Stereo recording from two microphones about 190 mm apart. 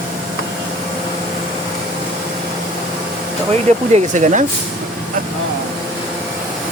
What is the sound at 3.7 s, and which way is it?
Speech, 40° right (ahead or behind).